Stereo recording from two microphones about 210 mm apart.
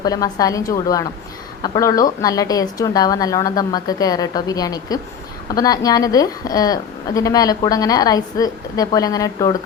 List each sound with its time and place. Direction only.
0.0 s a woman's voice: 15° left (ahead or behind)